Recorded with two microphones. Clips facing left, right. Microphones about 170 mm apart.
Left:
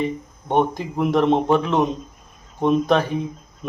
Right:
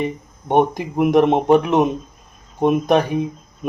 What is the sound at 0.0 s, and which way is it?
Speech, 15° right (ahead or behind).